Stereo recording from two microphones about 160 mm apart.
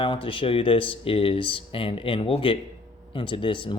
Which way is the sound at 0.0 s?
35° left (ahead or behind).